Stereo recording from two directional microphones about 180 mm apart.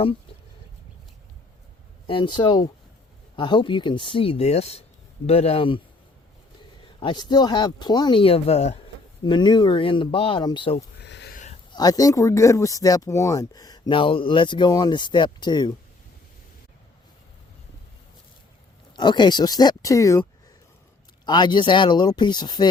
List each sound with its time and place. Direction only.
2.0 s speech: 25° left (ahead or behind)
6.8 s speech: 25° left (ahead or behind)
9.2 s speech: 25° left (ahead or behind)
11.0 s a sound: 70° left (ahead or behind)
11.7 s speech: 20° left (ahead or behind)
18.9 s speech: 25° left (ahead or behind)
21.2 s speech: 25° left (ahead or behind)